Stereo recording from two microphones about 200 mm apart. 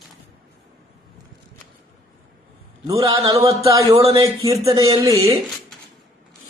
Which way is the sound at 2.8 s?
15° right (ahead or behind).